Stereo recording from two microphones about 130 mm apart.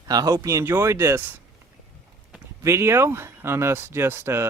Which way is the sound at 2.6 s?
20° right (ahead or behind).